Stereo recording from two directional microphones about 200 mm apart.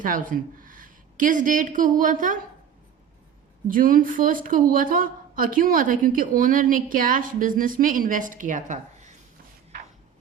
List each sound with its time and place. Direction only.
0.0 s a woman's voice: 40° right (ahead or behind)
3.7 s a woman's voice: 45° right (ahead or behind)